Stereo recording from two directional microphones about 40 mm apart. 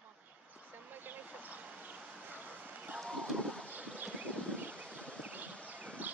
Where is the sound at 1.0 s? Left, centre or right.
Right.